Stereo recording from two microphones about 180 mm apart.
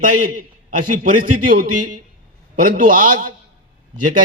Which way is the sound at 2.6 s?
45° right (ahead or behind).